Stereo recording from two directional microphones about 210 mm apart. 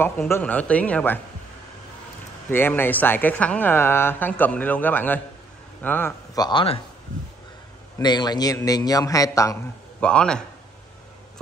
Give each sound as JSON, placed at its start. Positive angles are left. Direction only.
{"t": 0.0, "sound": "speech", "side_deg": 10}
{"t": 2.5, "sound": "speech", "side_deg": 10}
{"t": 8.0, "sound": "speech", "side_deg": 20}
{"t": 10.0, "sound": "a man's voice", "side_deg": 5}